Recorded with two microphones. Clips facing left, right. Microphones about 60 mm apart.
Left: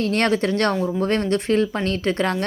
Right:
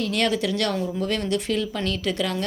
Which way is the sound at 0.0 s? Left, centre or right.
Left.